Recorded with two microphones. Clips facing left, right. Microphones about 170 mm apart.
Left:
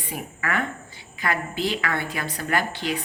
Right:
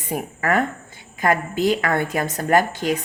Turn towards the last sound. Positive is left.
turn(degrees=-45)  # may be behind; listen again after turning